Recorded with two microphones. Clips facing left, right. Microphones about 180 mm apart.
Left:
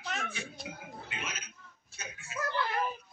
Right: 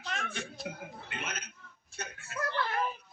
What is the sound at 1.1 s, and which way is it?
Chicken, 60° right (ahead or behind).